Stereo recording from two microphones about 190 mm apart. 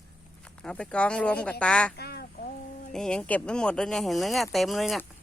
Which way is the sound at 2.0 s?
55° left (ahead or behind).